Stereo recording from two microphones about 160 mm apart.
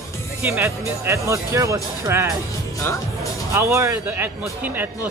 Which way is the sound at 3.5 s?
15° right (ahead or behind).